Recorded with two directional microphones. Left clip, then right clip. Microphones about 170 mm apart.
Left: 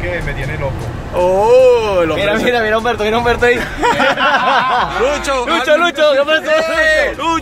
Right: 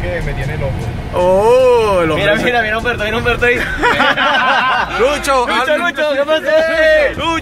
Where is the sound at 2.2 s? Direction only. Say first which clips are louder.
Right 1 dB; 55° left (ahead or behind).